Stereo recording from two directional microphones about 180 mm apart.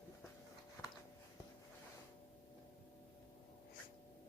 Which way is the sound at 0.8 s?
10° left (ahead or behind).